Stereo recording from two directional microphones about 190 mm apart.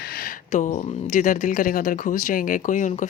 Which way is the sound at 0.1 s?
50° left (ahead or behind).